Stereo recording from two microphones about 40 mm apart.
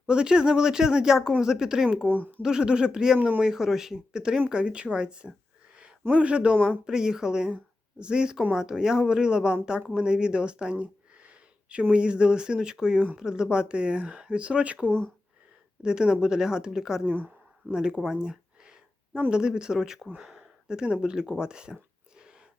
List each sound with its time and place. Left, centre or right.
0.1 s speech: right
3.2 s speech: right
3.4 s speech: centre
6.8 s speech: centre; by 14.9 s right
15.8 s speech: right
18.2 s a sound: right
19.3 s speech: right